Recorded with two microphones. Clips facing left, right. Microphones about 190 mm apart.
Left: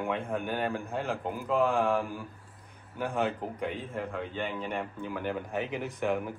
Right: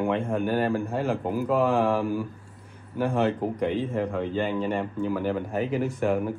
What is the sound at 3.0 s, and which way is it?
Speech, 60° right (ahead or behind).